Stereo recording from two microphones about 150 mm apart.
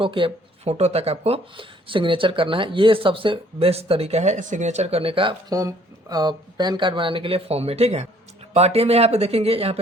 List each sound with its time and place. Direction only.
0.0 s speech: 35° right (ahead or behind)
5.5 s speech: 25° right (ahead or behind); by 9.8 s 40° right (ahead or behind)